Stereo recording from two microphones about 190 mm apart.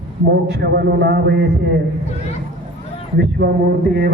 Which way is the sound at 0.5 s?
60° right (ahead or behind).